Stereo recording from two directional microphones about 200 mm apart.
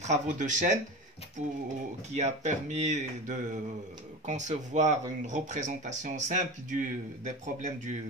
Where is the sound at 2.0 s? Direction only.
35° right (ahead or behind).